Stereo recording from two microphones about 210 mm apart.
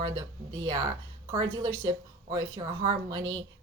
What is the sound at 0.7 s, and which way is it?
Speech, 20° right (ahead or behind).